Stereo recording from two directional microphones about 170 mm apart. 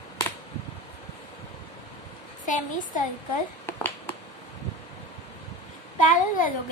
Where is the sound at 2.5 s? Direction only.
50° left (ahead or behind).